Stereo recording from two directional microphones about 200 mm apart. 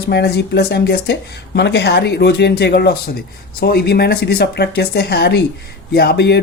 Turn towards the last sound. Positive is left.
turn(degrees=55)  # may be behind; listen again after turning